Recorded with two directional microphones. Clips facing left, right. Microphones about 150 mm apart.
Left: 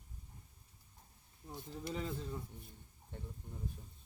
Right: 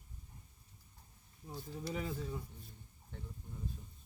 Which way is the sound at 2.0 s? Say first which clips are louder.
Right 1 dB; 5° right (ahead or behind).